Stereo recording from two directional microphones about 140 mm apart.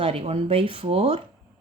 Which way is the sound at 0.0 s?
40° right (ahead or behind).